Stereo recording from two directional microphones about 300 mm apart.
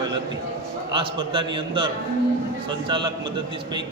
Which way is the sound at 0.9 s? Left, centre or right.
Centre.